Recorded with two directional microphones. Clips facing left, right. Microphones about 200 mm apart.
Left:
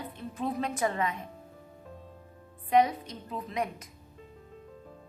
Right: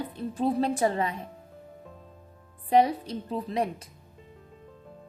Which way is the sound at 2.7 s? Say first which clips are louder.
Right 3 dB; 30° right (ahead or behind).